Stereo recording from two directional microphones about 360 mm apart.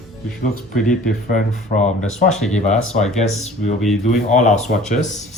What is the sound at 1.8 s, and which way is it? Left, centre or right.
Speech, centre.